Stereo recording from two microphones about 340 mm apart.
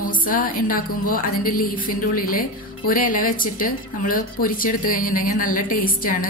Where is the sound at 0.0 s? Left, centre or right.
Left.